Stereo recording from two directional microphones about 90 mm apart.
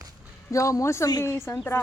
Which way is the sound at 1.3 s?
30° left (ahead or behind).